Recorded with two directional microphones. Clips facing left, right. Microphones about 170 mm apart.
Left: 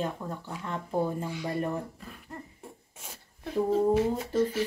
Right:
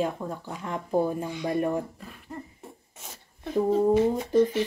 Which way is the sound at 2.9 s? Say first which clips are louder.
Right 1 dB; 10° left (ahead or behind).